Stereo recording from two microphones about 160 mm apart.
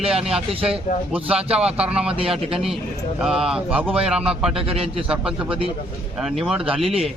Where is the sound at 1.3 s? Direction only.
40° right (ahead or behind).